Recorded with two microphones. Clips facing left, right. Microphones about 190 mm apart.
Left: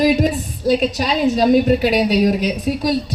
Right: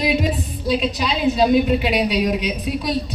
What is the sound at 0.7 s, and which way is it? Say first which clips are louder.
A man's voice: left 4 dB; 45° left (ahead or behind).